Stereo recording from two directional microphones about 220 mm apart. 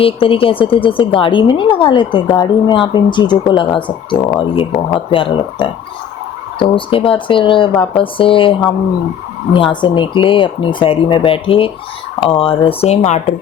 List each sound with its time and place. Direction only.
0.0 s a woman's voice: 25° left (ahead or behind)